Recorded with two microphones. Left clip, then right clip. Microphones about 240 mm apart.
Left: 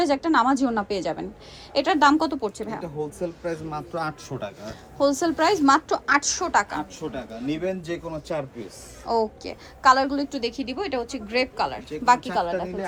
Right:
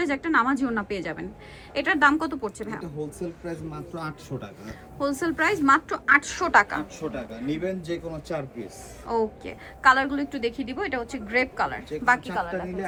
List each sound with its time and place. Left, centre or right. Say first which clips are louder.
0.0 s a woman's voice: left 3 dB; centre
2.8 s a woman's voice: left 4 dB; centre
4.6 s a woman's voice: left 7 dB; centre
9.0 s a woman's voice: left 2 dB; centre